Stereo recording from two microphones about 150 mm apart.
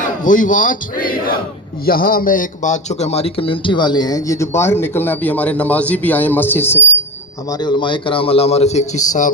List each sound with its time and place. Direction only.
0.0 s a man's voice: 60° left (ahead or behind); by 6.8 s 15° left (ahead or behind)
7.5 s a man's voice: 30° left (ahead or behind); by 9.3 s 55° left (ahead or behind)